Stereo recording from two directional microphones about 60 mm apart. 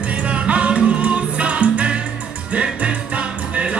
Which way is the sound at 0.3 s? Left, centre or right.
Right.